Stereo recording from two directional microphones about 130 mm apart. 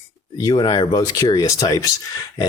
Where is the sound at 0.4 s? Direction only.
35° left (ahead or behind).